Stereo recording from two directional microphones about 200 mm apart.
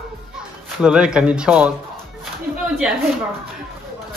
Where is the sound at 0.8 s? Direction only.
5° right (ahead or behind).